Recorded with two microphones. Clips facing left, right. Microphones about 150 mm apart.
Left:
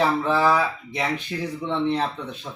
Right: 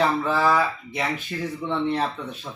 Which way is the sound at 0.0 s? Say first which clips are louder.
Left 1 dB; centre (ahead or behind).